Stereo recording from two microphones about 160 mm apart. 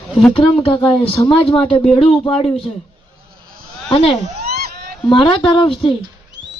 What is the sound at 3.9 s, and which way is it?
Speech, 35° left (ahead or behind).